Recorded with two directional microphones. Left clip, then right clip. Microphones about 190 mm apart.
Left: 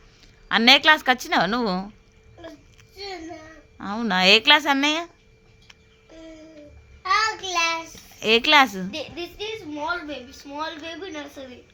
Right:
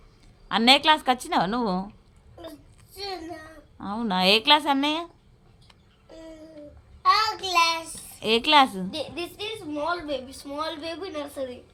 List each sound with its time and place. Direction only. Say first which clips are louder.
0.4 s a woman's voice: left 3 dB; centre (ahead or behind)
2.4 s a sound: even; 15° right (ahead or behind)
3.8 s a woman's voice: left 3 dB; 5° left (ahead or behind)
7.0 s child singing: right 1 dB; 10° right (ahead or behind)
8.2 s a woman's voice: left 2 dB; centre (ahead or behind)
10.1 s a woman's voice: right 3 dB; 25° right (ahead or behind)